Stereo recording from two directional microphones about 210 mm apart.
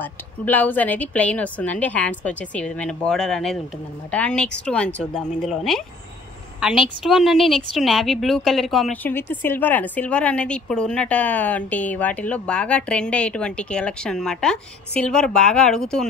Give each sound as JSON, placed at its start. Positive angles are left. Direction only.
{"t": 0.0, "sound": "a woman's voice", "side_deg": 10}
{"t": 7.0, "sound": "a woman's voice", "side_deg": 0}